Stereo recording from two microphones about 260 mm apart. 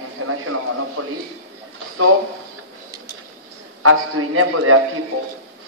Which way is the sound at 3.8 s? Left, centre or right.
Right.